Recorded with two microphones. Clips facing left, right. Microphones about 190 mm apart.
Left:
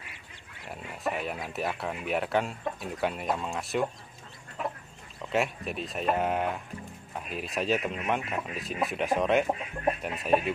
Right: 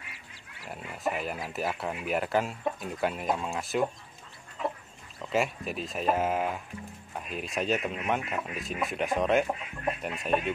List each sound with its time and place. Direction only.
0.7 s speech: centre (ahead or behind)
5.3 s speech: centre (ahead or behind)